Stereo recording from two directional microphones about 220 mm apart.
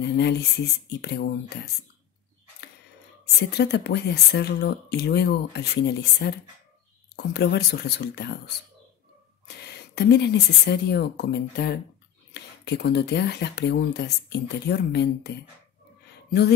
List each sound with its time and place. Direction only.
0.0 s speech: 50° left (ahead or behind)
3.5 s speech: 50° left (ahead or behind)
9.7 s speech: 50° left (ahead or behind)